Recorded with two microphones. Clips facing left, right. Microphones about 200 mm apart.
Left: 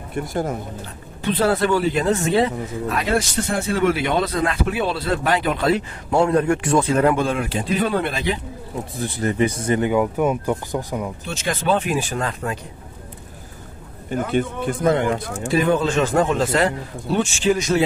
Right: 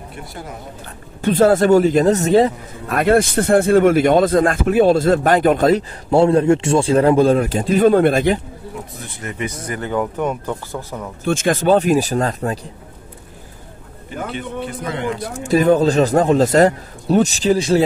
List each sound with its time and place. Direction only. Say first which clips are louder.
0.1 s speech: left 11 dB; 45° left (ahead or behind)
1.2 s speech: right 6 dB; 45° right (ahead or behind)
9.0 s speech: left 8 dB; 35° left (ahead or behind)
9.8 s speech: right 1 dB; 10° left (ahead or behind)
11.2 s a man's voice: right 9 dB; 50° right (ahead or behind)
14.3 s speech: left 6 dB; 50° left (ahead or behind)
15.4 s a man's voice: right 6 dB; 40° right (ahead or behind)